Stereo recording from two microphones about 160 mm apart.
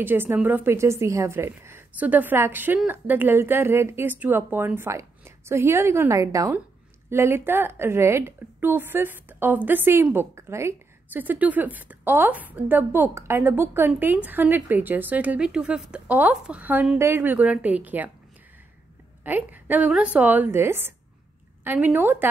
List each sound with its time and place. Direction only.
0.0 s a woman's voice: 15° right (ahead or behind)
19.2 s a woman's voice: 10° right (ahead or behind)